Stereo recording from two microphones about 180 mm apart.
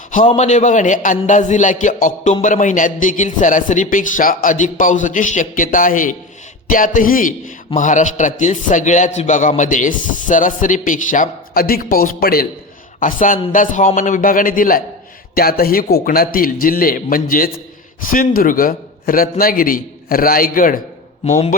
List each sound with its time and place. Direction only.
0.3 s a man's voice: 40° left (ahead or behind)
21.2 s a man's voice: 40° left (ahead or behind)